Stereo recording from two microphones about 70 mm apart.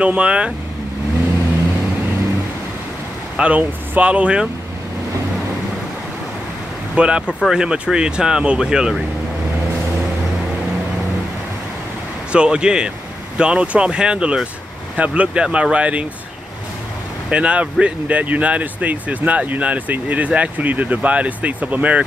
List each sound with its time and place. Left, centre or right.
0.0 s speech: centre
3.3 s speech: centre
7.0 s speech: centre
12.3 s speech: centre
17.3 s speech: centre